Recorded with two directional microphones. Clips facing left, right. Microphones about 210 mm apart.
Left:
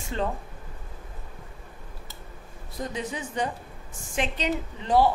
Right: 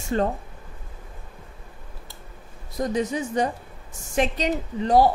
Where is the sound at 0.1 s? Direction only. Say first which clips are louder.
Right 6 dB; 50° right (ahead or behind).